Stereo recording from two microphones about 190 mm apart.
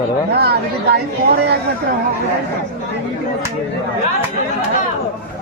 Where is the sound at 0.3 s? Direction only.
55° right (ahead or behind).